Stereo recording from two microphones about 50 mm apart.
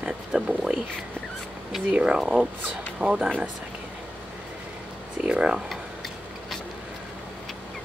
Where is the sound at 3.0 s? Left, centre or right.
Centre.